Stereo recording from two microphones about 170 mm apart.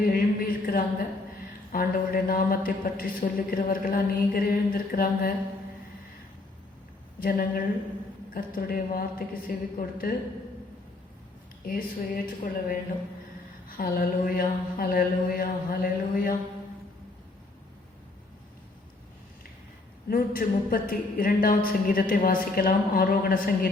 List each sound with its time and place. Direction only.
0.0 s a sound: 60° left (ahead or behind)
1.7 s speech: 60° left (ahead or behind)
7.2 s speech: 60° left (ahead or behind)
11.6 s speech: 60° left (ahead or behind)
20.1 s speech: 60° left (ahead or behind)